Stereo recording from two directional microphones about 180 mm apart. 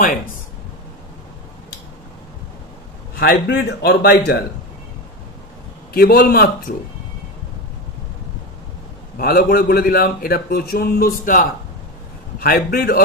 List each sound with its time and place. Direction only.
3.2 s a man's voice: 65° left (ahead or behind)
5.9 s a man's voice: 55° left (ahead or behind)
9.2 s a man's voice: 60° left (ahead or behind)